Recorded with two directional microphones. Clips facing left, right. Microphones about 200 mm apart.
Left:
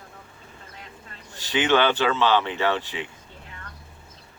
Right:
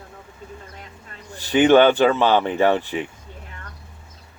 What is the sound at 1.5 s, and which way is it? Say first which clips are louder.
Speech: right 7 dB; 50° right (ahead or behind).